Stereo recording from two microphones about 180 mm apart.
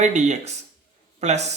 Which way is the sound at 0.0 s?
40° right (ahead or behind).